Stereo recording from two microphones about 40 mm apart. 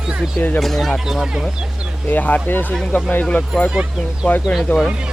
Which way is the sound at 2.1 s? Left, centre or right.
Left.